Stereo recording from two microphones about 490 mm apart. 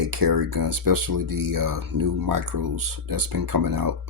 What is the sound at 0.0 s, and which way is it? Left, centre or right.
Speech, right.